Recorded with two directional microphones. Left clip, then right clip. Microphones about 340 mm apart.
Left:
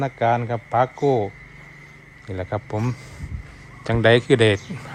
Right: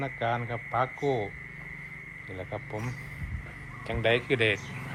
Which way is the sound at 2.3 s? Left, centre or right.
Left.